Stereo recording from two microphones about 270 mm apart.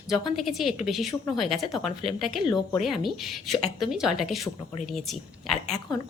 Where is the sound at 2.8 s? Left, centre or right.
Centre.